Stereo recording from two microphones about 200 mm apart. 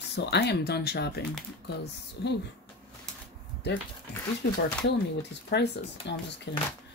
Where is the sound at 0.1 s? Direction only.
60° left (ahead or behind).